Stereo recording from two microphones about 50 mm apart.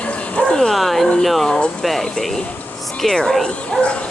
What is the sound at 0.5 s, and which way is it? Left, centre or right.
Dog, centre.